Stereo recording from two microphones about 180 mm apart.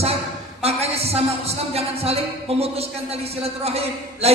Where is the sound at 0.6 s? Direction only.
35° right (ahead or behind).